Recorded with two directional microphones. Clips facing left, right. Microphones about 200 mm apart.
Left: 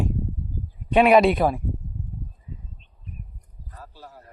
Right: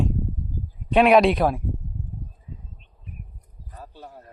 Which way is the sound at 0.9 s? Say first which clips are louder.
Even; centre (ahead or behind).